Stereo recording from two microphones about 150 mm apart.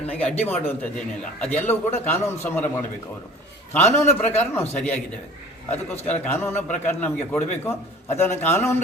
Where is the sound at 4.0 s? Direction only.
15° left (ahead or behind).